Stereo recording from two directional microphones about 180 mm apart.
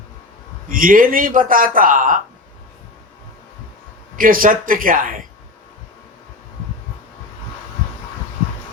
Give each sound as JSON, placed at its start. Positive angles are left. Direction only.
{"t": 0.7, "sound": "a man's voice", "side_deg": -50}
{"t": 4.2, "sound": "a man's voice", "side_deg": -50}